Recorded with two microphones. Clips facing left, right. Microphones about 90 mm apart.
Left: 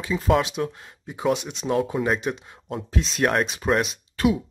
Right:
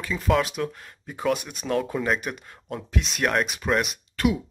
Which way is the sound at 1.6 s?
10° left (ahead or behind).